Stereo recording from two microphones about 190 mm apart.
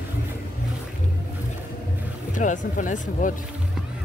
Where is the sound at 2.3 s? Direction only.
40° left (ahead or behind).